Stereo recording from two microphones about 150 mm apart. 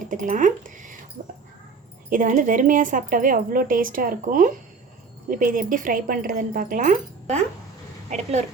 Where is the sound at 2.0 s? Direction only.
60° right (ahead or behind).